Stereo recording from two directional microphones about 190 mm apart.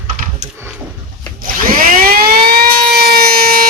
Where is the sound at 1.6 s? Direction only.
50° right (ahead or behind).